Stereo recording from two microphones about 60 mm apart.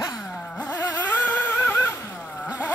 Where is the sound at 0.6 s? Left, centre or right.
Left.